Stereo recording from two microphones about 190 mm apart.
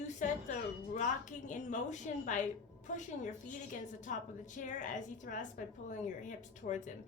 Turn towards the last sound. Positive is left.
turn(degrees=40)  # may be behind; listen again after turning